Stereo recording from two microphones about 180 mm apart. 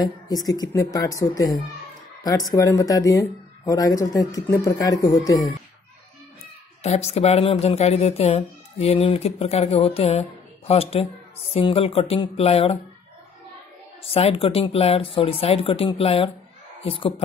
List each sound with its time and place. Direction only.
0.0 s speech: 20° left (ahead or behind)
6.8 s speech: 35° left (ahead or behind)
14.0 s speech: 35° left (ahead or behind)